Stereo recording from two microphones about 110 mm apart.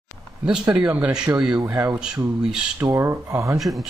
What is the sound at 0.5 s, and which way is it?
Speech, 10° right (ahead or behind).